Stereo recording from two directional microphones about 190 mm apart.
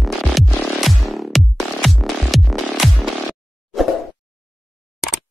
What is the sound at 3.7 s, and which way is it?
Plop, centre (ahead or behind).